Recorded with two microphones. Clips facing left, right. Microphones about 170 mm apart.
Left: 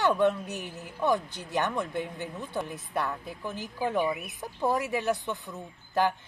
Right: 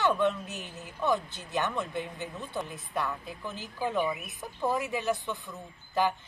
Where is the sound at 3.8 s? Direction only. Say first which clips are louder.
Left 2 dB; 15° left (ahead or behind).